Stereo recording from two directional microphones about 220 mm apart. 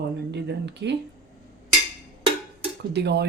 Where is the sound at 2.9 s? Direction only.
50° right (ahead or behind).